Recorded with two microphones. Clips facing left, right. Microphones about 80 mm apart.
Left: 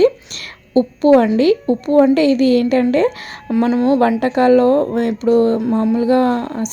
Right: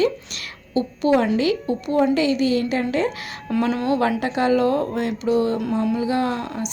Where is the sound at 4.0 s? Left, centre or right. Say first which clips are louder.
Left 7 dB; left.